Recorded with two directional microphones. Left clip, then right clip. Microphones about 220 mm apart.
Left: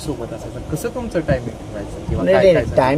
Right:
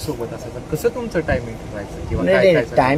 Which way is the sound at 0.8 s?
25° left (ahead or behind).